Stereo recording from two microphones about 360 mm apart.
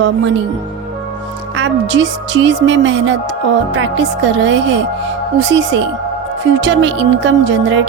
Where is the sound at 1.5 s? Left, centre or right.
Right.